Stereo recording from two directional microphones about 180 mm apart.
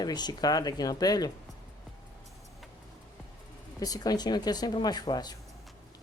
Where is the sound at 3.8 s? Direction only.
20° left (ahead or behind).